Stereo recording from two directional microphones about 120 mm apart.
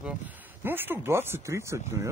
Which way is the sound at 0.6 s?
15° right (ahead or behind).